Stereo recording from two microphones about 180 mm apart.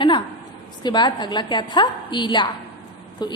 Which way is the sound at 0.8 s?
25° left (ahead or behind).